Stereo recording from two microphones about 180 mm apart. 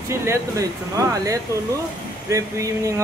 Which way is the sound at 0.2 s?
15° right (ahead or behind).